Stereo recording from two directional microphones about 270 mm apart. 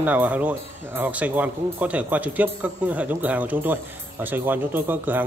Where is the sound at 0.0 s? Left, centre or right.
Centre.